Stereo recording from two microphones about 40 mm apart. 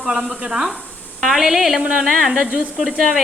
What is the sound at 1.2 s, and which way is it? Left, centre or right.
A woman's voice, centre.